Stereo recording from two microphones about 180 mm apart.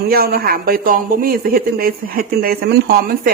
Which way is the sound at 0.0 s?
60° right (ahead or behind).